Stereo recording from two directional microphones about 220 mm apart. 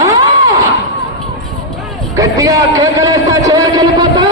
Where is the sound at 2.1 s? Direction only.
15° right (ahead or behind).